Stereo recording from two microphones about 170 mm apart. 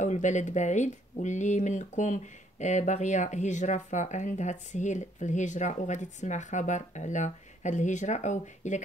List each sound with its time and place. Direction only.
0.0 s speech: 45° left (ahead or behind)